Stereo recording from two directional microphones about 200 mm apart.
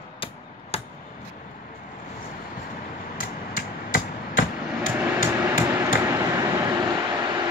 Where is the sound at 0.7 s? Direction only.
30° left (ahead or behind).